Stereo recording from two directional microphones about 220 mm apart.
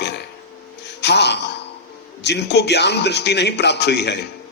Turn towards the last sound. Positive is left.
turn(degrees=50)  # may be behind; listen again after turning